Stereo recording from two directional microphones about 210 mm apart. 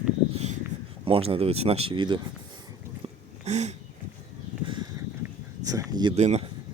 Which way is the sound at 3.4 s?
30° right (ahead or behind).